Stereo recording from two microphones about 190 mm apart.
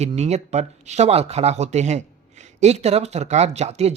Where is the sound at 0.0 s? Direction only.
35° right (ahead or behind).